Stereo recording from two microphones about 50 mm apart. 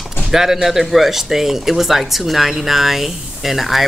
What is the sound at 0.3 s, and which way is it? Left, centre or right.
Speech, centre.